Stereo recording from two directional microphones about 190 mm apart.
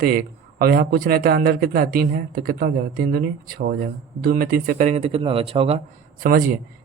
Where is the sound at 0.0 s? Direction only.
50° right (ahead or behind); by 5.8 s 30° right (ahead or behind).